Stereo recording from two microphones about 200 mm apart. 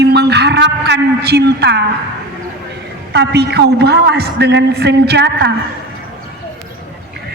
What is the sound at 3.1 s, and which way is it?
A woman's voice, 55° right (ahead or behind).